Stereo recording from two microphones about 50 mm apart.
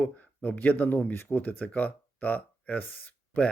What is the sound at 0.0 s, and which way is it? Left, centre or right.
Speech, left.